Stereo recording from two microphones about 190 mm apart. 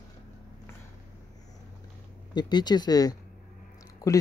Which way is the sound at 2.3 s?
20° left (ahead or behind).